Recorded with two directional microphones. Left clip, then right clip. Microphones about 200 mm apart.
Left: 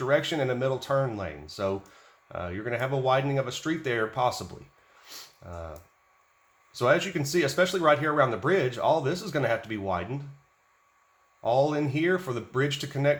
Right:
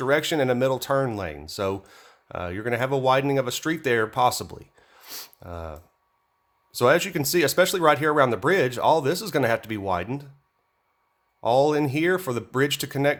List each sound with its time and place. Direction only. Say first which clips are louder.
0.0 s speech: right 3 dB; 50° right (ahead or behind)
5.0 s a sound: right 5 dB; 50° right (ahead or behind)
6.7 s speech: right 4 dB; 50° right (ahead or behind)
11.3 s speech: right 4 dB; 50° right (ahead or behind)